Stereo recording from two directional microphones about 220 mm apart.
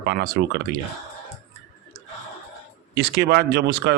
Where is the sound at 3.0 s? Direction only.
45° right (ahead or behind).